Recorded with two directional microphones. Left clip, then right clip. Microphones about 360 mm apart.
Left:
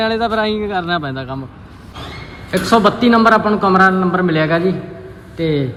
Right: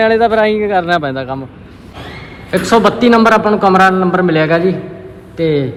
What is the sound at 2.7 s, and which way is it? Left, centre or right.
Speech, right.